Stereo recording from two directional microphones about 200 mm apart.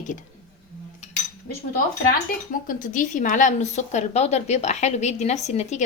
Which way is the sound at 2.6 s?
45° left (ahead or behind).